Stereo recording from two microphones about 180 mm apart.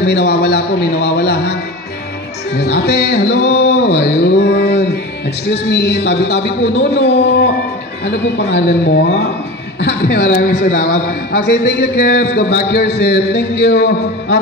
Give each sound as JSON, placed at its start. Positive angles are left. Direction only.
{"t": 0.0, "sound": "a man's voice", "side_deg": 70}
{"t": 2.5, "sound": "a man's voice", "side_deg": 70}